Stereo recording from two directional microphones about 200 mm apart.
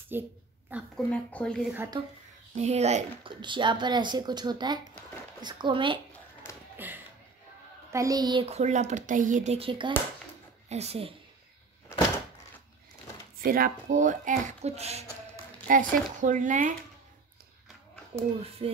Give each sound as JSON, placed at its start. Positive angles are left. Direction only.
{"t": 0.1, "sound": "a woman's voice", "side_deg": -10}
{"t": 0.9, "sound": "speech", "side_deg": 5}
{"t": 1.7, "sound": "a woman's voice", "side_deg": -10}
{"t": 2.5, "sound": "speech", "side_deg": -35}
{"t": 7.9, "sound": "a child's voice", "side_deg": -15}
{"t": 13.4, "sound": "a child's voice", "side_deg": -45}
{"t": 18.1, "sound": "speech", "side_deg": -30}